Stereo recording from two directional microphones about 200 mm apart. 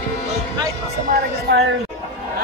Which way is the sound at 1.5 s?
55° right (ahead or behind).